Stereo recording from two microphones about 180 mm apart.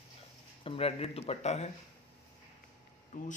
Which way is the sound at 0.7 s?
35° left (ahead or behind).